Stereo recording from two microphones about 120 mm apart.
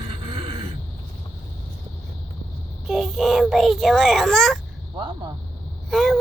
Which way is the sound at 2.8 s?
Centre (ahead or behind).